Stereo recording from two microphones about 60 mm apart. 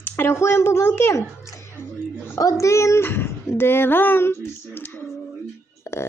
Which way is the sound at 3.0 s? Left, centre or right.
Left.